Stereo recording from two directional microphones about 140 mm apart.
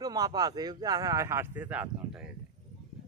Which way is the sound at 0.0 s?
30° right (ahead or behind).